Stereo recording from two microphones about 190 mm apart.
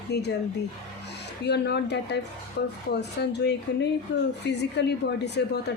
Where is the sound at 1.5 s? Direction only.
60° left (ahead or behind).